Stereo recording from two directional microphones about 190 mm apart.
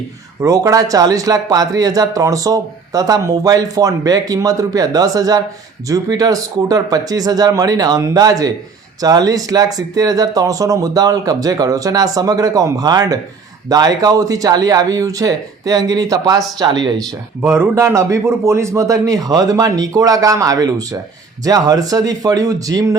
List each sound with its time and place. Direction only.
0.4 s a man's voice: 20° right (ahead or behind)